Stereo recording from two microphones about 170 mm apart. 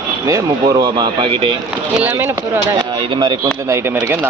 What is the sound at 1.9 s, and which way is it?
Speech, 10° right (ahead or behind).